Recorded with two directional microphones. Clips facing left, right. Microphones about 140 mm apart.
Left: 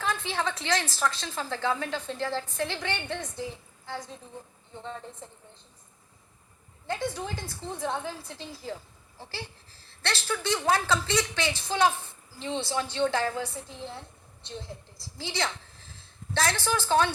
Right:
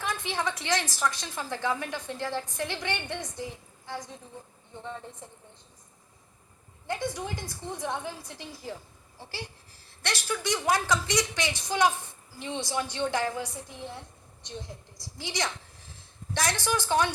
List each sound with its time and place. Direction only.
0.0 s a woman's voice: 15° right (ahead or behind)
6.8 s a woman's voice: 15° right (ahead or behind)
9.8 s a woman's voice: 15° right (ahead or behind)
15.7 s a sound: 15° right (ahead or behind)